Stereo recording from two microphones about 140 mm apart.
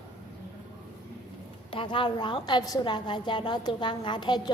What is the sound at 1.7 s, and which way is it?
Speech, 35° left (ahead or behind).